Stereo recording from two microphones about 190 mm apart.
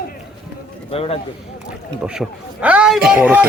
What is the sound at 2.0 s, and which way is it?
A man's voice, 5° right (ahead or behind).